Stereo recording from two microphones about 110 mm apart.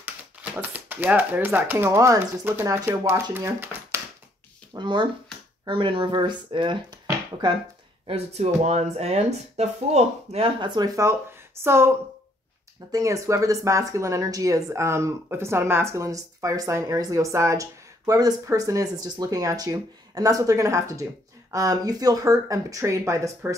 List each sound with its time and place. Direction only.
0.0 s speech: 15° right (ahead or behind)
4.7 s speech: 45° right (ahead or behind)
8.1 s speech: 75° right (ahead or behind)
10.6 s speech: 45° right (ahead or behind)
11.6 s speech: 25° right (ahead or behind)
12.9 s speech: 30° right (ahead or behind)